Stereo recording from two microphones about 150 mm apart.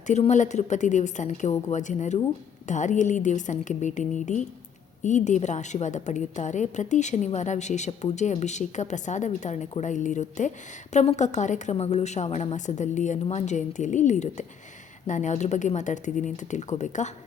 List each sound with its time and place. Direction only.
0.1 s a woman's voice: 50° left (ahead or behind)